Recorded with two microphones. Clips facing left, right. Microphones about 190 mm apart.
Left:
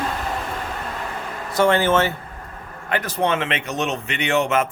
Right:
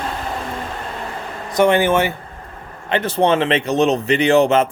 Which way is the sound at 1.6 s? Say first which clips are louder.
Right 3 dB; 15° right (ahead or behind).